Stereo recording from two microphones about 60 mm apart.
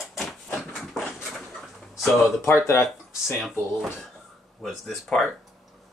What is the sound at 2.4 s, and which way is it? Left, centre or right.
Speech, left.